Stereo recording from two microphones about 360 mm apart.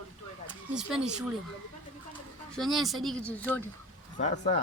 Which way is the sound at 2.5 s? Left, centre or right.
Centre.